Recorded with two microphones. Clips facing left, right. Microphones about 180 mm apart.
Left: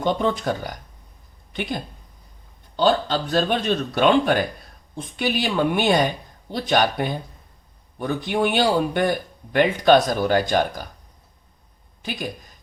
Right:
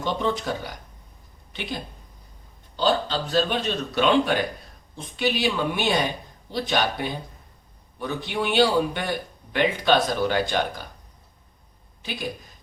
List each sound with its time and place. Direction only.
0.0 s a man's voice: 50° left (ahead or behind)
2.7 s a man's voice: 50° left (ahead or behind)